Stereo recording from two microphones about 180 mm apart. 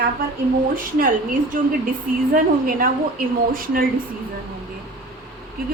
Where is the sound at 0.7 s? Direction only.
50° right (ahead or behind).